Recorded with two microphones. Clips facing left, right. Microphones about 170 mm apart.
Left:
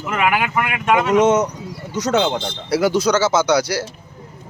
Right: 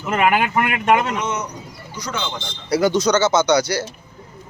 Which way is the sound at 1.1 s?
90° left.